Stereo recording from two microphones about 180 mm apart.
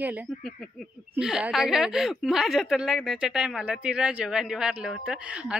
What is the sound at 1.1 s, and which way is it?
A woman's voice, 5° right (ahead or behind).